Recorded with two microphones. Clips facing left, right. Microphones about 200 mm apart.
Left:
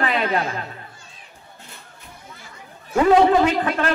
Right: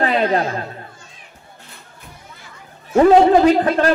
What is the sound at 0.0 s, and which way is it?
Chatter, 35° right (ahead or behind).